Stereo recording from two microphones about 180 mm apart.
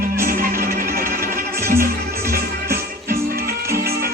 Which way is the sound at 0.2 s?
50° right (ahead or behind).